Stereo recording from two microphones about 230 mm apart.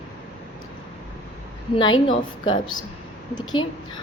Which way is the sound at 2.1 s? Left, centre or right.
Left.